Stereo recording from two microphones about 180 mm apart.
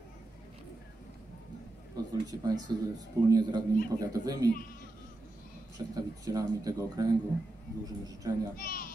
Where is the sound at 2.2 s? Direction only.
20° right (ahead or behind).